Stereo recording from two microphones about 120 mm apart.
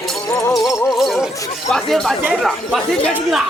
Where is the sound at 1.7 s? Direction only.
5° left (ahead or behind).